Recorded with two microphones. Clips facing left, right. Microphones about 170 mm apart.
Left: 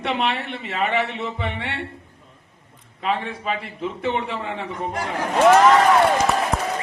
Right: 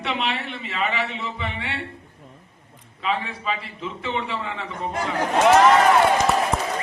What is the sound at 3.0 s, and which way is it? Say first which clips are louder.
A man's voice: left 2 dB; 55° left (ahead or behind).